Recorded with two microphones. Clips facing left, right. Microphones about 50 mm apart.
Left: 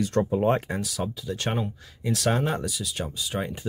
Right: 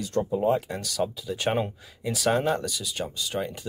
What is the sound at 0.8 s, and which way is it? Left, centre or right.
Speech, centre.